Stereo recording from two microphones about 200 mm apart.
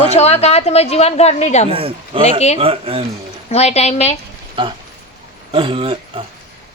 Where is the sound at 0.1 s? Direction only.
30° left (ahead or behind).